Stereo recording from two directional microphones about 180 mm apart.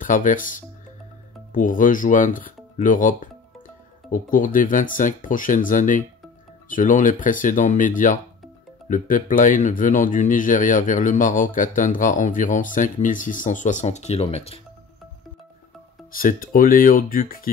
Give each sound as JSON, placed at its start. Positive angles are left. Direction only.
{"t": 0.0, "sound": "speech", "side_deg": 45}
{"t": 16.1, "sound": "speech", "side_deg": 50}